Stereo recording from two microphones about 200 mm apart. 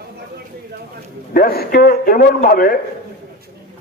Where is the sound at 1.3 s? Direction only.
50° left (ahead or behind).